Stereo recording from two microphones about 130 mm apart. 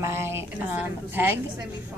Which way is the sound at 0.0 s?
20° right (ahead or behind).